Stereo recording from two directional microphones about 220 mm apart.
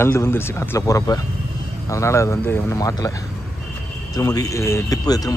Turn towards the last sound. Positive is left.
turn(degrees=15)  # may be behind; listen again after turning